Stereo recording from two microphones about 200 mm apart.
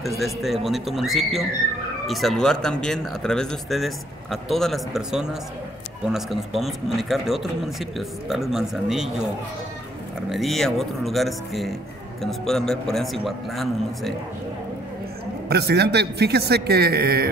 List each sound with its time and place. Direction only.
0.0 s speech: centre (ahead or behind)
10.3 s speech: centre (ahead or behind)
15.4 s a man's voice: 55° right (ahead or behind)